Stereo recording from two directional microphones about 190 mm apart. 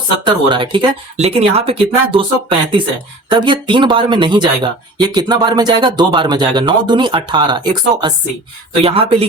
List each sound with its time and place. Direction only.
0.4 s speech: 25° right (ahead or behind)